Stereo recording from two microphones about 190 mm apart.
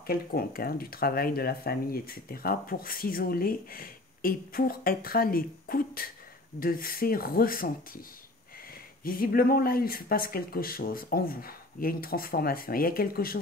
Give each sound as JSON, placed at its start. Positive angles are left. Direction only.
{"t": 0.0, "sound": "speech", "side_deg": 50}
{"t": 9.0, "sound": "speech", "side_deg": 50}